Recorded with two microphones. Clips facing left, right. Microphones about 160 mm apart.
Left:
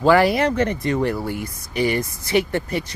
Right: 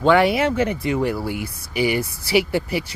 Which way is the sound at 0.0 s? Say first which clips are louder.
Even; centre (ahead or behind).